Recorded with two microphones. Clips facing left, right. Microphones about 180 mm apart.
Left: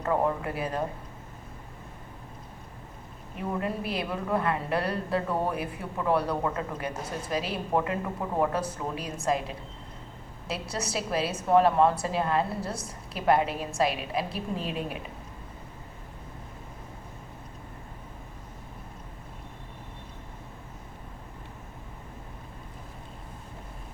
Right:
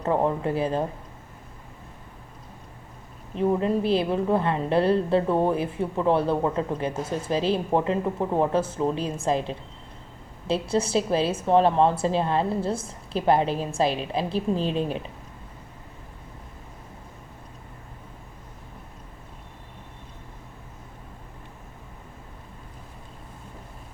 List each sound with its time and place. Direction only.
0.0 s a woman's voice: 25° right (ahead or behind)
3.3 s a woman's voice: 25° right (ahead or behind)